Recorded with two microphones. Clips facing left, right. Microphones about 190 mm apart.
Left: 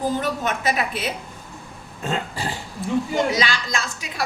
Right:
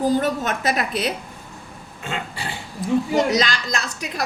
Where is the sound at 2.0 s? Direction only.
40° left (ahead or behind).